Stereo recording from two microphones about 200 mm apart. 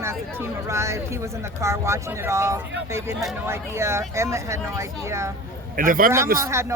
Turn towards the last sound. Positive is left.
turn(degrees=-15)  # may be behind; listen again after turning